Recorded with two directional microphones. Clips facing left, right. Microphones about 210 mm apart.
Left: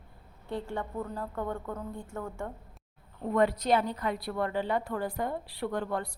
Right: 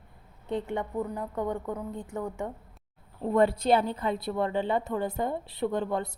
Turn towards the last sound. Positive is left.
turn(degrees=-20)  # may be behind; listen again after turning